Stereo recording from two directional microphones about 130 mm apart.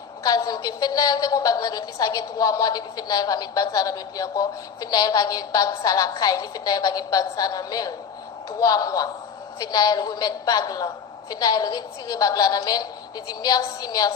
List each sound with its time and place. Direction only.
0.3 s a woman's voice: 30° left (ahead or behind)